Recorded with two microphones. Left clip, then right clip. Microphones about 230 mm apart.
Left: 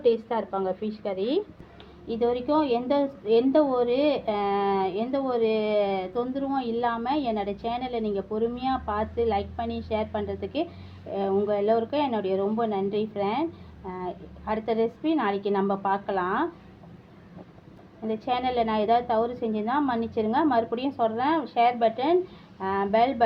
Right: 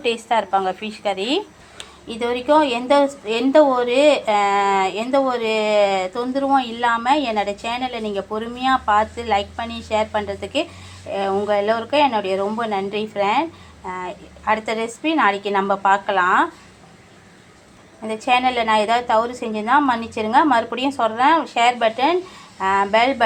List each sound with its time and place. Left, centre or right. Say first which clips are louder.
0.0 s a woman's voice: right 4 dB; centre
18.0 s a woman's voice: right 9 dB; centre